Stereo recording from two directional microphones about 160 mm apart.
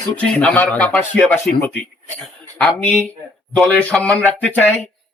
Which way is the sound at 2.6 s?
5° left (ahead or behind).